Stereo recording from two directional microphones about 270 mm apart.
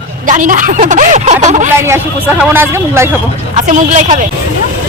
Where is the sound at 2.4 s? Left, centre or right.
Centre.